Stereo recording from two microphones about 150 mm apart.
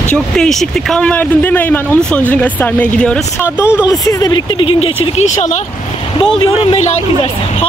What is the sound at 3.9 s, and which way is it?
Speech, 25° left (ahead or behind).